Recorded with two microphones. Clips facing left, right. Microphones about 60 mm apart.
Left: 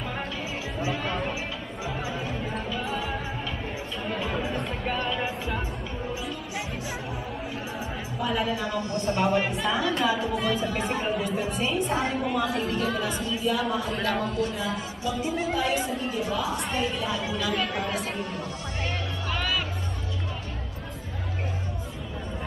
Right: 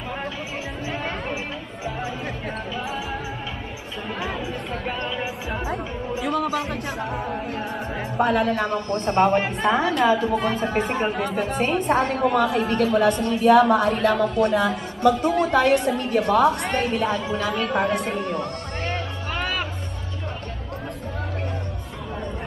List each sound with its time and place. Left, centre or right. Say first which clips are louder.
0.8 s music: even; right
2.7 s music: right 1 dB; centre
6.2 s music: right 10 dB; right
8.2 s a woman's voice: right 7 dB; right
11.1 s a woman's voice: right 4 dB; right
18.9 s music: right 3 dB; right